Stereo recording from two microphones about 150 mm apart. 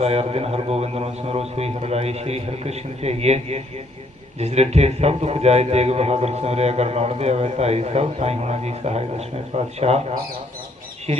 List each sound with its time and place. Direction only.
0.0 s a man's voice: 40° right (ahead or behind)